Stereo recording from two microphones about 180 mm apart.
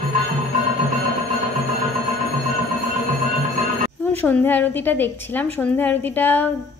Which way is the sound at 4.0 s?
10° left (ahead or behind).